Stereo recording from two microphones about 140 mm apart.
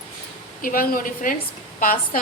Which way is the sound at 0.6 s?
85° left.